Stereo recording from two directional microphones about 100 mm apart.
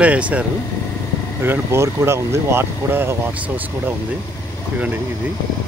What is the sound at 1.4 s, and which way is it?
Speech, 25° right (ahead or behind).